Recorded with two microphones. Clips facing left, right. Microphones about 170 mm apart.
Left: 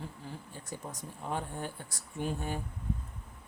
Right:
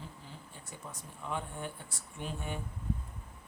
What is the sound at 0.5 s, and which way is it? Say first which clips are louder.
A man's voice: left 5 dB; 40° left (ahead or behind).